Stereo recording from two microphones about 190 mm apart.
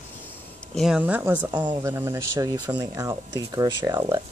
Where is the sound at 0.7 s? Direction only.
5° right (ahead or behind).